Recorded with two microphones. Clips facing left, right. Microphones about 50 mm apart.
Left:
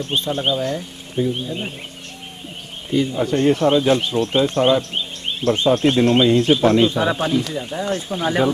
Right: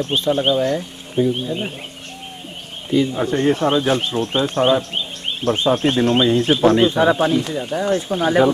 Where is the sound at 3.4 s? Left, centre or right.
Right.